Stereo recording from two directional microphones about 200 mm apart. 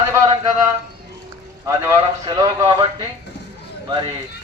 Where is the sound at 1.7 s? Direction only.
15° right (ahead or behind).